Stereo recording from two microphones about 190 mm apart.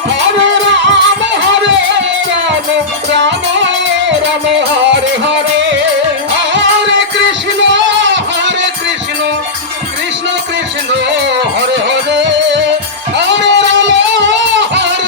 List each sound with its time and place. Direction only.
0.7 s music: 70° right (ahead or behind)
3.2 s music: 70° right (ahead or behind)
4.9 s music: 70° right (ahead or behind)
10.9 s music: 65° right (ahead or behind)
13.1 s music: 70° right (ahead or behind)